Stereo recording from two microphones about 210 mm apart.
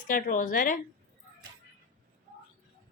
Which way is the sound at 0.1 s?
40° left (ahead or behind).